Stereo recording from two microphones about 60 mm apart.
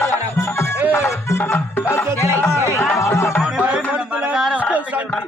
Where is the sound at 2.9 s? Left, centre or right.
Left.